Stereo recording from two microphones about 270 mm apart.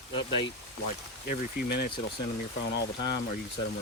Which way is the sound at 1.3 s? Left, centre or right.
Left.